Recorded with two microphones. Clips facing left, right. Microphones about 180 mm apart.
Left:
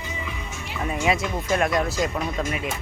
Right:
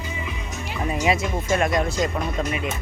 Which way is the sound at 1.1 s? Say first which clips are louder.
Right 1 dB; centre (ahead or behind).